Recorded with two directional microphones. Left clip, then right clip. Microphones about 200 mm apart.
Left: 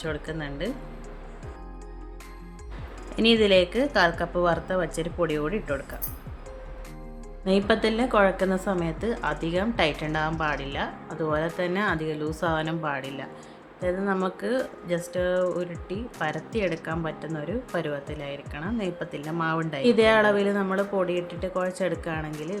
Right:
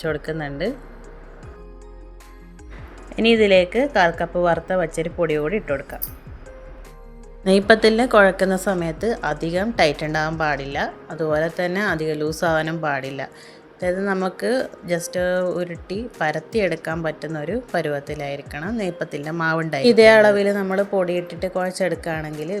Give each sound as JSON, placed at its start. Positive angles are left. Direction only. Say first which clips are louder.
{"t": 0.0, "sound": "a woman's voice", "louder": "right 7 dB", "side_deg": -15}
{"t": 3.1, "sound": "a woman's voice", "louder": "right 5 dB", "side_deg": -10}
{"t": 7.7, "sound": "a woman's voice", "louder": "right 10 dB", "side_deg": -20}